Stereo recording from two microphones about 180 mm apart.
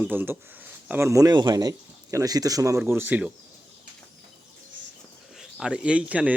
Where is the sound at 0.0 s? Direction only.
10° right (ahead or behind).